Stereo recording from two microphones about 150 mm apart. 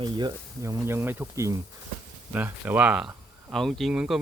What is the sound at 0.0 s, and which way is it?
Speech, 30° right (ahead or behind).